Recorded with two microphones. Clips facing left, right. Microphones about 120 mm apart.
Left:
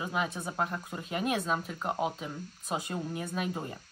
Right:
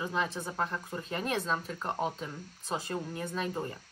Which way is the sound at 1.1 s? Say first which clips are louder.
Left 2 dB; 10° left (ahead or behind).